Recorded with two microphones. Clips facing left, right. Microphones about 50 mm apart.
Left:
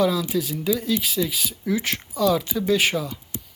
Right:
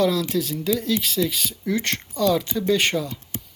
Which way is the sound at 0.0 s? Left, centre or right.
Centre.